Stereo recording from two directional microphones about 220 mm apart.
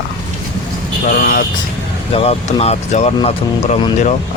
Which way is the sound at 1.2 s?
40° left (ahead or behind).